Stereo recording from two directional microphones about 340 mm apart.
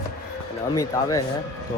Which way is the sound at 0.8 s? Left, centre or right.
Centre.